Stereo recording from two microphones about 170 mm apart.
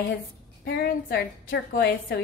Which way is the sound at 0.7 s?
65° left (ahead or behind).